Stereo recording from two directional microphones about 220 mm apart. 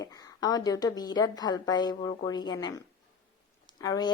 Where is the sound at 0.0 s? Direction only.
15° left (ahead or behind).